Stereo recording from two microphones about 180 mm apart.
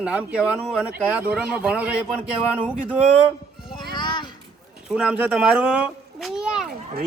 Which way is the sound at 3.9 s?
25° left (ahead or behind).